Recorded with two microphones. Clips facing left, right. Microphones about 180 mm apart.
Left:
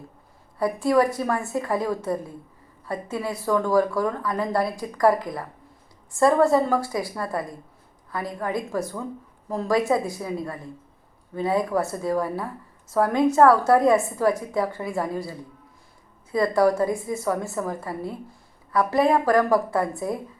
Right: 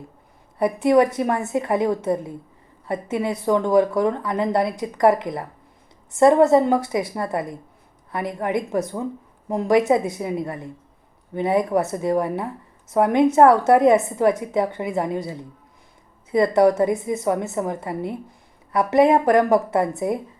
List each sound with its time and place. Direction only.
0.6 s speech: 20° right (ahead or behind)